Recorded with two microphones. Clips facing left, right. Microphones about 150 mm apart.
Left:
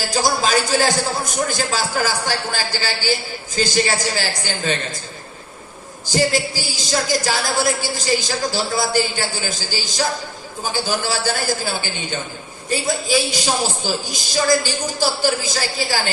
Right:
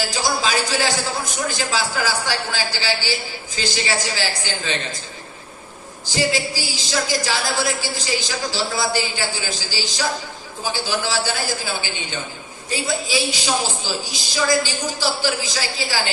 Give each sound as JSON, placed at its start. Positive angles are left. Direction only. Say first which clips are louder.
{"t": 0.1, "sound": "a woman's voice", "louder": "left 3 dB", "side_deg": 45}
{"t": 6.1, "sound": "a woman's voice", "louder": "left 3 dB", "side_deg": 45}